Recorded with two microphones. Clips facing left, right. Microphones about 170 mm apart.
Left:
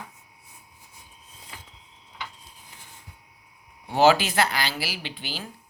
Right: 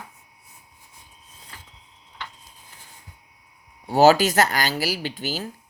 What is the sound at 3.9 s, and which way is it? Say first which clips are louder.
Speech: right 4 dB; 40° right (ahead or behind).